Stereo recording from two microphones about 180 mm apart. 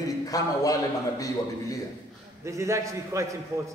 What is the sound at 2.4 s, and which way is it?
Speech, 15° right (ahead or behind).